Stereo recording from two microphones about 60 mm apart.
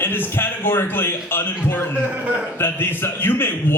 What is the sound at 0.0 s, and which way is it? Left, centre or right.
A man's voice, left.